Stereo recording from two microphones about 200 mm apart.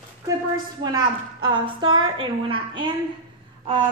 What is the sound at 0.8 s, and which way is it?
A woman's voice, 20° right (ahead or behind).